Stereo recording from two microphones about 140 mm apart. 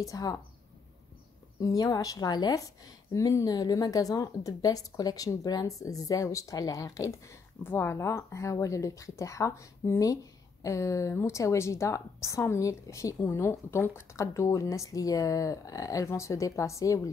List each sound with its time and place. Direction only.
0.0 s a woman's voice: 25° left (ahead or behind)
1.6 s a woman's voice: 25° left (ahead or behind)